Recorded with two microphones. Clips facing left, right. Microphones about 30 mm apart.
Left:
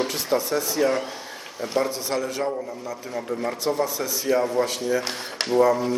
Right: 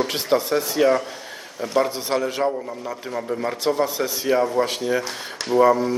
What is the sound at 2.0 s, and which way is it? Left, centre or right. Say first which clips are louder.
Speech: right 3 dB; right.